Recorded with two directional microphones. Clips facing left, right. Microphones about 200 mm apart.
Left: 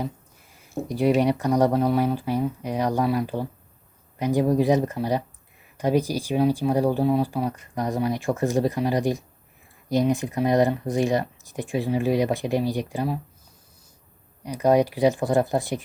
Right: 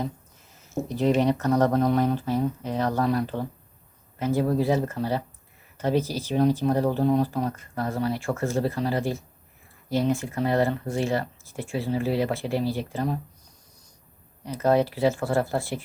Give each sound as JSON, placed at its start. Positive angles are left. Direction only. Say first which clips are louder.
{"t": 0.5, "sound": "speech", "louder": "even", "side_deg": 10}
{"t": 14.4, "sound": "speech", "louder": "left 2 dB", "side_deg": 15}